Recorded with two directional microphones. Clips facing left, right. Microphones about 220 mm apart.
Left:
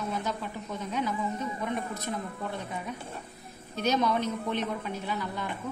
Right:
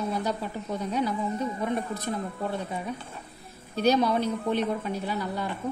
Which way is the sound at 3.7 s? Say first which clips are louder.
Right 4 dB; 35° right (ahead or behind).